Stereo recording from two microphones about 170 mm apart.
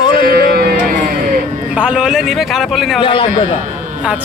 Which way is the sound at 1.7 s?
5° right (ahead or behind).